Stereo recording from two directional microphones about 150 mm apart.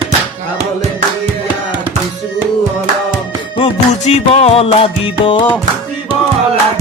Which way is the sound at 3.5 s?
40° left (ahead or behind).